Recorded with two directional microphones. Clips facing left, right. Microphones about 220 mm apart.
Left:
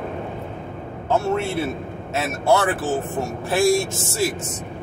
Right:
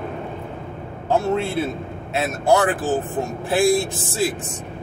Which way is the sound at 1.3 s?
15° right (ahead or behind).